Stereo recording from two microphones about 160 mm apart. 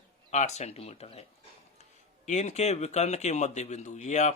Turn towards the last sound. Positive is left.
turn(degrees=45)  # may be behind; listen again after turning